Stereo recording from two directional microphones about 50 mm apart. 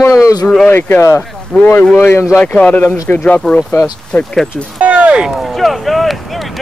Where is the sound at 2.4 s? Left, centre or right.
Left.